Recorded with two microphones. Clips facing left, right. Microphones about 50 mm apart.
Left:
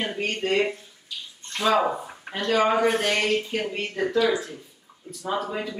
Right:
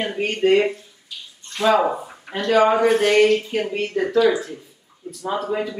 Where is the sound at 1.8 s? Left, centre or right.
Centre.